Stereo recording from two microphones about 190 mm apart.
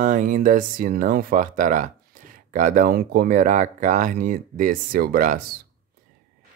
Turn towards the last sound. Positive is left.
turn(degrees=-45)  # may be behind; listen again after turning